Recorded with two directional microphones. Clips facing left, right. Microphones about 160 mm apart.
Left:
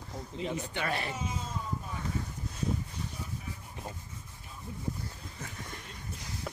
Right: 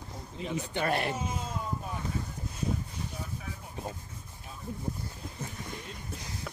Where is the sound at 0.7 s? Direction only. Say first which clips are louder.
Right 8 dB; 50° right (ahead or behind).